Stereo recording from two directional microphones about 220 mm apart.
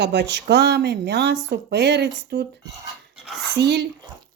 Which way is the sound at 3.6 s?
50° right (ahead or behind).